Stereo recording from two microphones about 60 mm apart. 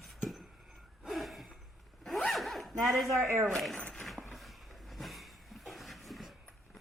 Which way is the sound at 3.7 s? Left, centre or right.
Centre.